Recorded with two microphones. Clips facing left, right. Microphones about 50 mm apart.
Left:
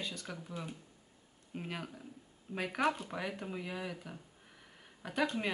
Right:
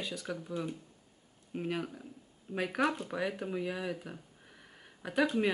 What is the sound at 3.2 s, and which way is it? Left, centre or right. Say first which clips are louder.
Speech: right 5 dB; centre.